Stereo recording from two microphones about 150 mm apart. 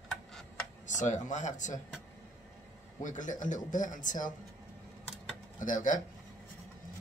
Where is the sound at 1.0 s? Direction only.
55° left (ahead or behind).